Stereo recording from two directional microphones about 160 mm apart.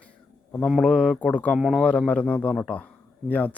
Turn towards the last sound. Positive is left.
turn(degrees=10)  # may be behind; listen again after turning